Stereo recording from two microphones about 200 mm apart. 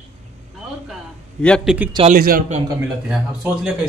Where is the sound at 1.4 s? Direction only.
Centre (ahead or behind).